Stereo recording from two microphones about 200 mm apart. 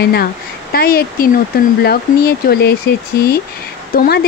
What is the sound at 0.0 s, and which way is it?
Speech, 50° left (ahead or behind).